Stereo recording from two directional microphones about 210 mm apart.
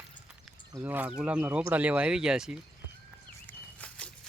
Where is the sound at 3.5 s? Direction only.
5° left (ahead or behind).